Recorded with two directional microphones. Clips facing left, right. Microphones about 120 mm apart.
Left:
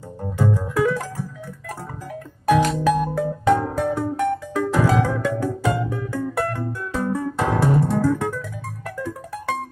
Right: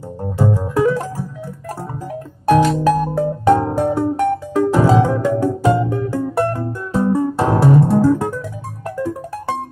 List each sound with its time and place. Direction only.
0.6 s music: 30° right (ahead or behind)
2.4 s music: 25° right (ahead or behind)
3.7 s music: 35° right (ahead or behind)
4.8 s music: 20° right (ahead or behind)
5.4 s music: 35° right (ahead or behind)
5.9 s music: 25° right (ahead or behind)
8.0 s music: 20° right (ahead or behind)